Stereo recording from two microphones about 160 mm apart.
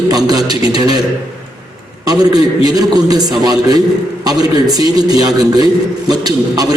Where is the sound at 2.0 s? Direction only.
25° right (ahead or behind).